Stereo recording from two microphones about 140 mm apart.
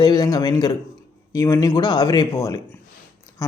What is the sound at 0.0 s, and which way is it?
A man's voice, 30° left (ahead or behind).